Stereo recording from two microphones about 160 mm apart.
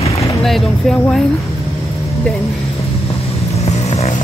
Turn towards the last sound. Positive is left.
turn(degrees=45)  # may be behind; listen again after turning